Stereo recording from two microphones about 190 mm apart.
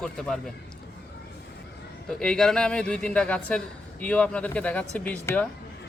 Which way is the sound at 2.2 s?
5° left (ahead or behind).